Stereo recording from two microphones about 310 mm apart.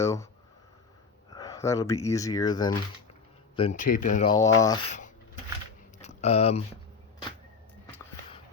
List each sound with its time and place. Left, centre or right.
0.0 s speech: centre
1.3 s speech: centre
6.0 s a sound: left